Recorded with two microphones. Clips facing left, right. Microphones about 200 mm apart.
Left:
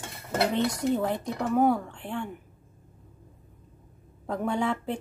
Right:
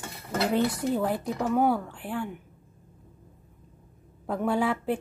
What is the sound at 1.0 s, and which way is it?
Speech, 5° right (ahead or behind).